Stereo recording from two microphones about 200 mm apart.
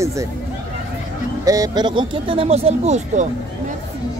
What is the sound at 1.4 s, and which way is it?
Speech, 15° right (ahead or behind).